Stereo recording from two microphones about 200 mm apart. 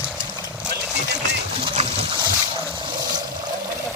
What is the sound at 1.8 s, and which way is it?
Boat, 30° right (ahead or behind).